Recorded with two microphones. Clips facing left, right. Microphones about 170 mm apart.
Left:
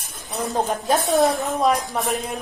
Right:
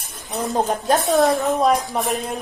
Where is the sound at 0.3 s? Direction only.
10° right (ahead or behind).